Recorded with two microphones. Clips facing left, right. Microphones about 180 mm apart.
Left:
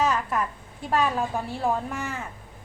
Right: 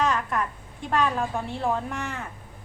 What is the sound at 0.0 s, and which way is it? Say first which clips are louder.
A woman's voice: left 1 dB; 5° left (ahead or behind).